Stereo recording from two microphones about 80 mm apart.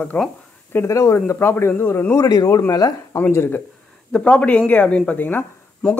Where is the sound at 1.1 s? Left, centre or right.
Left.